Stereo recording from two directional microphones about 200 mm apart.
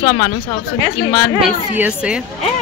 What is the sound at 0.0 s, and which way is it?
Speech, 35° left (ahead or behind).